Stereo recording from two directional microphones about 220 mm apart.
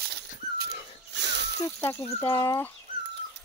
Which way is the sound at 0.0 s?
50° right (ahead or behind).